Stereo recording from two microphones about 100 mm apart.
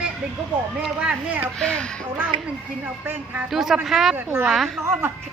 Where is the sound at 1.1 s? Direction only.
15° right (ahead or behind).